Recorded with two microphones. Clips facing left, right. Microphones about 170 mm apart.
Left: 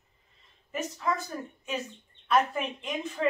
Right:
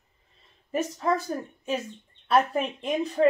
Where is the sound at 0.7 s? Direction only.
35° right (ahead or behind).